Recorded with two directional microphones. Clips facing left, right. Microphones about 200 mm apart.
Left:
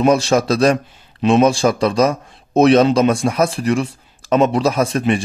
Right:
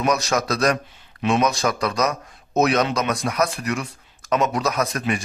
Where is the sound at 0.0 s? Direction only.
30° left (ahead or behind).